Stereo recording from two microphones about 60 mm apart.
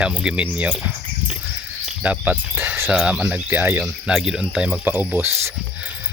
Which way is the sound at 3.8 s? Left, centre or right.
Centre.